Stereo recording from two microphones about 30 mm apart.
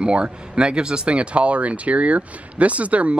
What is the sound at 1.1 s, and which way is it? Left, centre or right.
Speech, right.